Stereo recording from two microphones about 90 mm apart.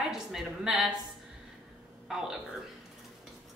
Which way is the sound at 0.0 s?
5° right (ahead or behind).